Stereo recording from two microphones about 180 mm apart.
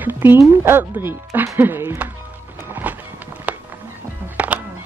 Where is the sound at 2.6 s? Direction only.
10° right (ahead or behind).